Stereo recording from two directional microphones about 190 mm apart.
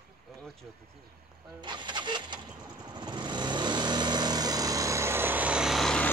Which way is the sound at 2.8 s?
25° right (ahead or behind).